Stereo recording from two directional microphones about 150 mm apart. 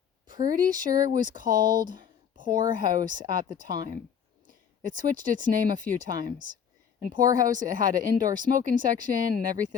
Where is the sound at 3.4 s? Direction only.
60° right (ahead or behind).